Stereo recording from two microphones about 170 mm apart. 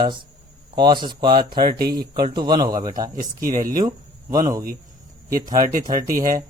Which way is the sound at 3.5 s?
55° right (ahead or behind).